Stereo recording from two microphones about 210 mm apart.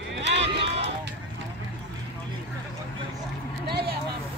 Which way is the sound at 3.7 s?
50° right (ahead or behind).